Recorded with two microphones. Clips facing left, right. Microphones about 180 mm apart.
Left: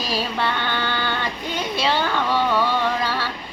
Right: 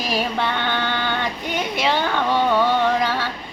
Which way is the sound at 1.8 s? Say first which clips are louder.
Right 1 dB; 15° right (ahead or behind).